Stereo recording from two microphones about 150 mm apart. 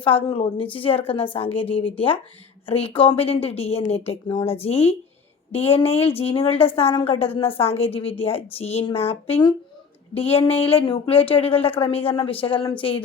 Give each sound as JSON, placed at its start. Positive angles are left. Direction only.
{"t": 0.3, "sound": "a woman's voice", "side_deg": 35}